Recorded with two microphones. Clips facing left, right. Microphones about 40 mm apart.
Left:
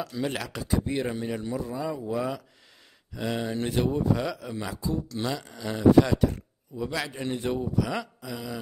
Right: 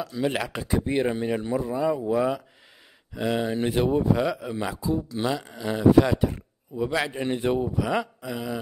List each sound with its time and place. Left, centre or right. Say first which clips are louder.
0.0 s speech: right 4 dB; centre
0.4 s speech: right 2 dB; right